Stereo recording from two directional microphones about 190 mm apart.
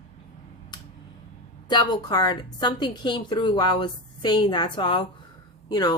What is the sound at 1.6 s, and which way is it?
A woman's voice, 20° left (ahead or behind).